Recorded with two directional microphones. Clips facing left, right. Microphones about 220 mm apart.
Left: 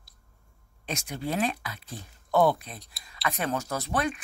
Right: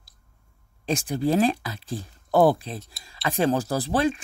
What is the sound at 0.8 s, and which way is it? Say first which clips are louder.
Speech: right 9 dB; 30° right (ahead or behind).